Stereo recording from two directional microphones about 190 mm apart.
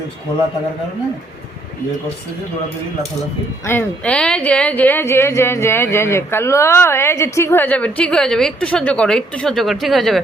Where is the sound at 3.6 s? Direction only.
10° left (ahead or behind).